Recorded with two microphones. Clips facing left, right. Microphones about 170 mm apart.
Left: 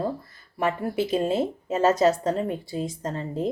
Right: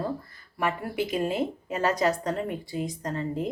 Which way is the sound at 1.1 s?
25° left (ahead or behind).